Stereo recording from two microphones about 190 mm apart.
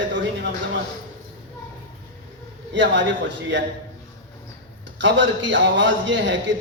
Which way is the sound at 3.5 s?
70° right (ahead or behind).